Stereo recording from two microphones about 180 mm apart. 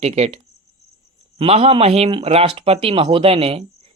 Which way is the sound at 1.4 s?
35° right (ahead or behind).